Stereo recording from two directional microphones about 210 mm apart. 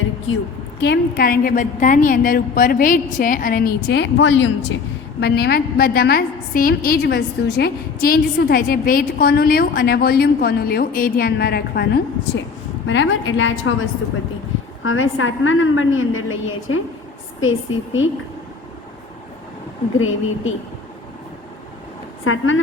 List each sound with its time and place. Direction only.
0.8 s a woman's voice: 50° left (ahead or behind)
5.2 s a woman's voice: 50° left (ahead or behind)
12.9 s a woman's voice: 65° left (ahead or behind)
14.8 s a woman's voice: 70° left (ahead or behind)
20.0 s a woman's voice: 65° left (ahead or behind)
22.2 s a woman's voice: 70° left (ahead or behind)